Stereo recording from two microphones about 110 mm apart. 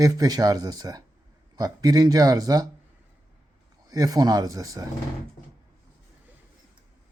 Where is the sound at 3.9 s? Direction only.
35° right (ahead or behind).